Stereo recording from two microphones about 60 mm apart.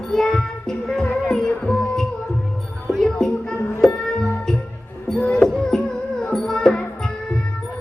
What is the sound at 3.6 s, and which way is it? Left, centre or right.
Music, left.